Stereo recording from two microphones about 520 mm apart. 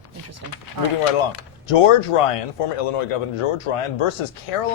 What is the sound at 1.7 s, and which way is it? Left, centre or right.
Speech, left.